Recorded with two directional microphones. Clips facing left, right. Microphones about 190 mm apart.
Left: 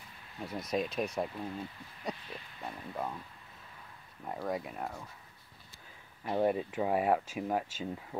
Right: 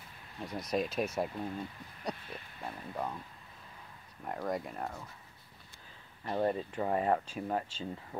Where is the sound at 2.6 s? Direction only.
Centre (ahead or behind).